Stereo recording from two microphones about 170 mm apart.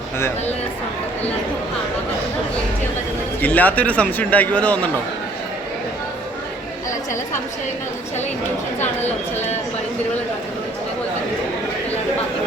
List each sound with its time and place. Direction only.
3.4 s a man's voice: 10° left (ahead or behind)
9.0 s a woman's voice: 40° left (ahead or behind)